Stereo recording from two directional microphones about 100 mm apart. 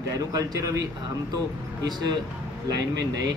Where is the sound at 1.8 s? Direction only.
45° right (ahead or behind).